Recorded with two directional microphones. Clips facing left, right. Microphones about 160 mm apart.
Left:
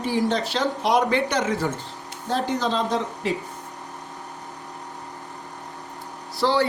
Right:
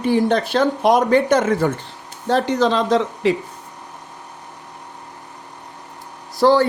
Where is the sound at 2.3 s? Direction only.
85° right.